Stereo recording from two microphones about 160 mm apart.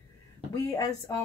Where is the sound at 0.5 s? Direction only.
20° left (ahead or behind).